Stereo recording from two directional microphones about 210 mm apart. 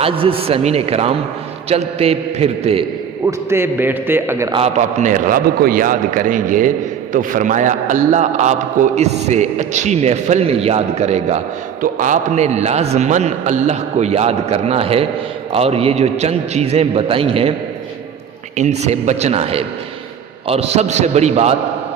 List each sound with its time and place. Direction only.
0.0 s a man's voice: 25° right (ahead or behind)
3.2 s a man's voice: 10° right (ahead or behind)
4.5 s a man's voice: 30° right (ahead or behind)
18.5 s a man's voice: 30° right (ahead or behind)